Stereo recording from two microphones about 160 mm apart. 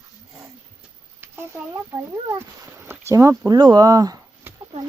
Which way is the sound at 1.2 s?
15° right (ahead or behind).